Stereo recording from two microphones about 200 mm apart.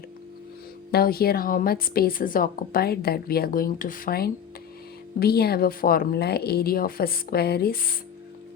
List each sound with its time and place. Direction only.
0.9 s a woman's voice: 50° left (ahead or behind)